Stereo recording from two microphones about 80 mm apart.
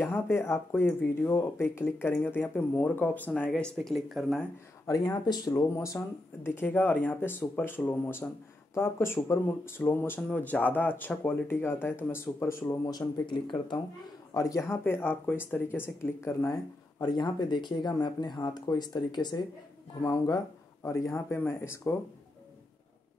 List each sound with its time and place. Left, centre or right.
0.0 s speech: left
3.8 s speech: centre
4.8 s speech: left
12.6 s speech: left
14.3 s speech: left
14.8 s speech: left
17.0 s speech: left
20.8 s speech: left